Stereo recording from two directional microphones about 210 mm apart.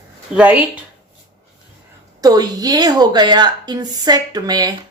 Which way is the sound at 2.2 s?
20° right (ahead or behind).